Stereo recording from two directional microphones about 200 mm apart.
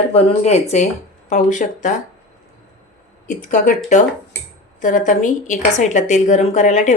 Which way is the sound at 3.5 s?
35° left (ahead or behind).